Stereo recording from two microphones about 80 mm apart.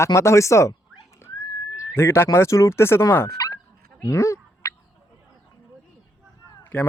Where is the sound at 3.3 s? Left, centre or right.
Left.